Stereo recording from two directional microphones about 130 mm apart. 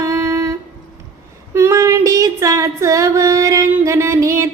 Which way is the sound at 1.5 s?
20° right (ahead or behind).